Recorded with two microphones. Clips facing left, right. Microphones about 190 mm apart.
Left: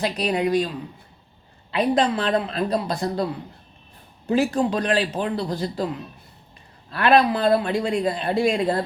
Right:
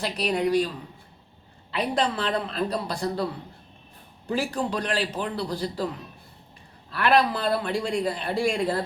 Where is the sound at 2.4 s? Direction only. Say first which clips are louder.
Left 4 dB; 15° left (ahead or behind).